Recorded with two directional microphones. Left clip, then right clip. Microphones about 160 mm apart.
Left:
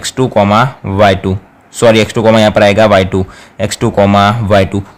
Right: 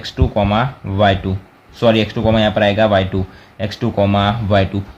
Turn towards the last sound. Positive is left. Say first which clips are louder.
# left 6 dB
turn(degrees=45)  # may be behind; listen again after turning